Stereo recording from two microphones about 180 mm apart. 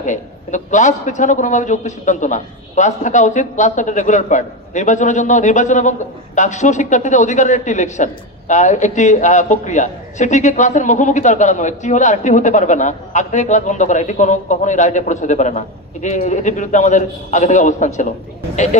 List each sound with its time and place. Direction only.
0.0 s a man's voice: 45° left (ahead or behind)